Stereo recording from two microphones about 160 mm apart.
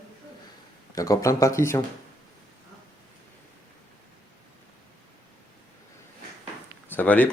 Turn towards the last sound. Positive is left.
turn(degrees=10)  # may be behind; listen again after turning